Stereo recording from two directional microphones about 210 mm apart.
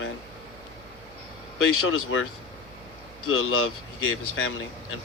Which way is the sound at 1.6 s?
75° left (ahead or behind).